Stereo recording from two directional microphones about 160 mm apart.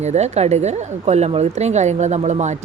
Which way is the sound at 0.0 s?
45° right (ahead or behind).